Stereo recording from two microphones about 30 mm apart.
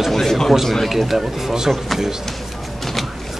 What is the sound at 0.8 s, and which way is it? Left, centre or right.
Speech, centre.